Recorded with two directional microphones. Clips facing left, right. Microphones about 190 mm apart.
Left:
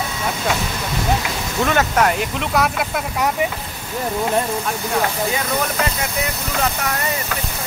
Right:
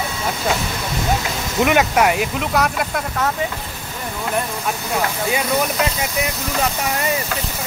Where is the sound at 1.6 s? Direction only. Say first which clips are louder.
Right 2 dB; 10° right (ahead or behind).